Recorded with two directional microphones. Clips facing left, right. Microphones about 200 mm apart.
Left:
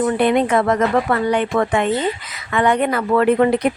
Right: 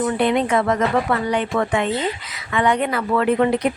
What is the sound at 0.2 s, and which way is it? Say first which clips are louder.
Speech: left 1 dB; 50° left (ahead or behind).